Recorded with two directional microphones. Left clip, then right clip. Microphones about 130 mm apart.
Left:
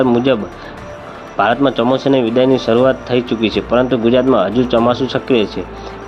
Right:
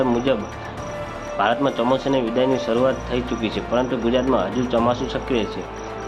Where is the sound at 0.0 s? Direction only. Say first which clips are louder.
Left 7 dB; 40° left (ahead or behind).